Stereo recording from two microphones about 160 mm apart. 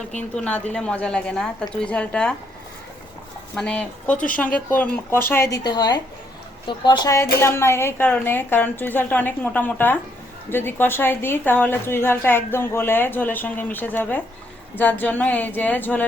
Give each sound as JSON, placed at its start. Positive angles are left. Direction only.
{"t": 0.3, "sound": "a woman's voice", "side_deg": 10}
{"t": 3.5, "sound": "a woman's voice", "side_deg": 5}